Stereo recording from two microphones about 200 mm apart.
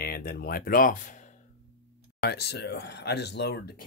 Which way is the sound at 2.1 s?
55° left (ahead or behind).